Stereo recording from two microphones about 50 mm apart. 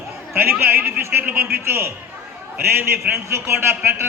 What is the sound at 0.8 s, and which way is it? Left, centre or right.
Speech, right.